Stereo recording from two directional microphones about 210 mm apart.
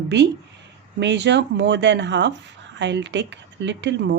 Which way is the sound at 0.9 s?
55° right (ahead or behind).